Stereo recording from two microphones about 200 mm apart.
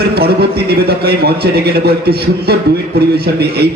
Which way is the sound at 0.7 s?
50° right (ahead or behind).